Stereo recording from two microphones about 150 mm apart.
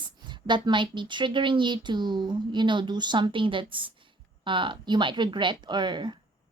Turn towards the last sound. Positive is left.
turn(degrees=-30)  # may be behind; listen again after turning